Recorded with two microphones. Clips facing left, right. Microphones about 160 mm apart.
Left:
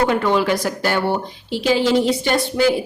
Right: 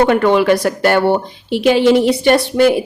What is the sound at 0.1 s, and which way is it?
A woman's voice, 65° right (ahead or behind).